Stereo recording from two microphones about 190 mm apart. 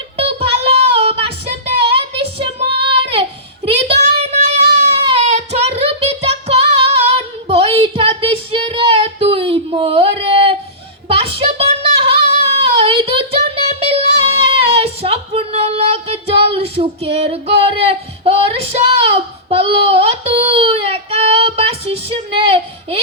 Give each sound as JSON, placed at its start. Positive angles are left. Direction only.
{"t": 0.2, "sound": "child singing", "side_deg": -30}